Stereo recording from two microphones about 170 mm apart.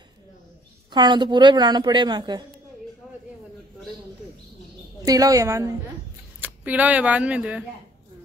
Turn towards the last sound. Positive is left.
turn(degrees=-5)  # may be behind; listen again after turning